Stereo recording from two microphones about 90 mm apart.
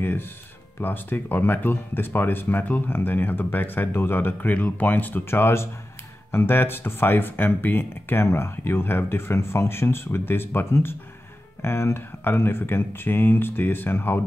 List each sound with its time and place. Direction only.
0.0 s music: 25° left (ahead or behind)
0.7 s speech: 20° left (ahead or behind)